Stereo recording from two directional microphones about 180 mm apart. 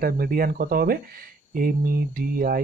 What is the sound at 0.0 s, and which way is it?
Speech, 50° right (ahead or behind).